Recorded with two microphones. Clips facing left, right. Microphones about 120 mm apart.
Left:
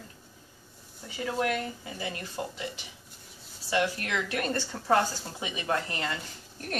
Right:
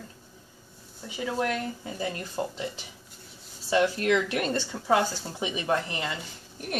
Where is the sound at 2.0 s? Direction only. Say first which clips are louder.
Right 4 dB; 35° right (ahead or behind).